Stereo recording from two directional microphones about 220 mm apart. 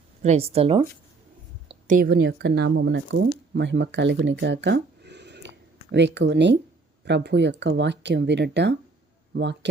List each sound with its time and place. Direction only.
0.2 s speech: 30° right (ahead or behind)
1.6 s speech: 35° right (ahead or behind); by 9.6 s 50° right (ahead or behind)